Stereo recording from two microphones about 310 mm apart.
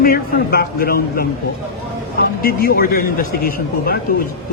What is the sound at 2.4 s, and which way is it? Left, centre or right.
A man's voice, left.